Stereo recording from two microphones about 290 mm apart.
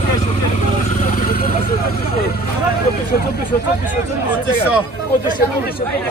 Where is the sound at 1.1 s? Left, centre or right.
Left.